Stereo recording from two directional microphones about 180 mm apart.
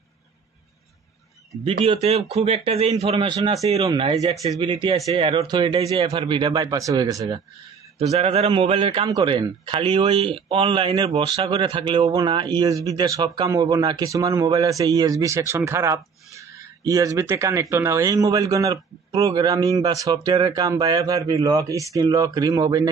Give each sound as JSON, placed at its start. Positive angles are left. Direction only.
{"t": 1.6, "sound": "a man's voice", "side_deg": -30}
{"t": 8.1, "sound": "a man's voice", "side_deg": -35}